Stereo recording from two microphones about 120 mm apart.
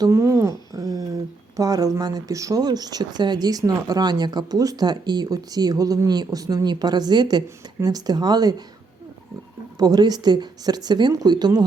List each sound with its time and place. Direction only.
0.0 s speech: 25° right (ahead or behind)
0.7 s a sound: 30° right (ahead or behind)
1.5 s speech: 30° right (ahead or behind)
9.7 s speech: 30° right (ahead or behind)